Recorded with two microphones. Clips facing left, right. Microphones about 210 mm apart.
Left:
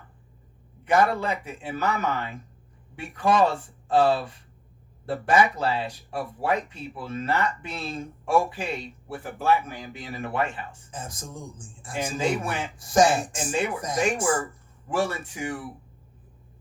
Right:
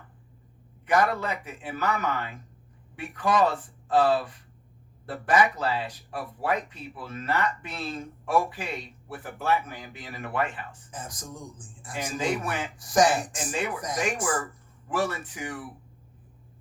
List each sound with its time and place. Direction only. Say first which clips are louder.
0.9 s speech: left 2 dB; 25° left (ahead or behind)